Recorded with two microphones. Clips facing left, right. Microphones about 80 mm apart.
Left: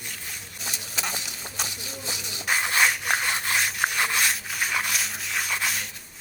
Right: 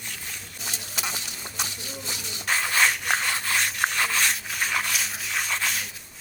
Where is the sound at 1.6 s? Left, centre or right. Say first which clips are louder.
Even; centre.